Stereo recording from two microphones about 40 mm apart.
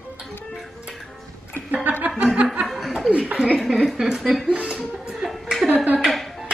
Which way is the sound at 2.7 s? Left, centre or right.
Centre.